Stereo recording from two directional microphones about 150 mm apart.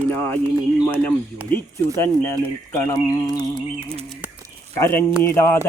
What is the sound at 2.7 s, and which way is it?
Speech, 15° left (ahead or behind).